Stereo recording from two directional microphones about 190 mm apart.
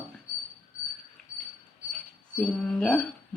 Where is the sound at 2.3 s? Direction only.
5° left (ahead or behind).